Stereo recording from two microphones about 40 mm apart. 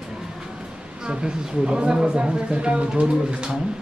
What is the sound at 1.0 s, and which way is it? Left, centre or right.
A woman's voice, right.